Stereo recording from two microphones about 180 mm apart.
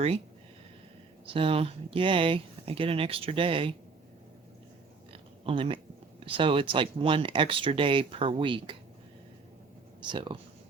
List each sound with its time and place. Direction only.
1.3 s speech: 30° right (ahead or behind)
5.1 s speech: 30° right (ahead or behind)
10.0 s speech: 25° right (ahead or behind)